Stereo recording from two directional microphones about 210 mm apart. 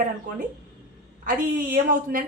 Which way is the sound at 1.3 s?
40° right (ahead or behind).